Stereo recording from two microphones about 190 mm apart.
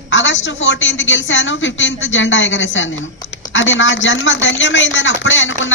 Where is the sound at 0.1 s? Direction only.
80° left.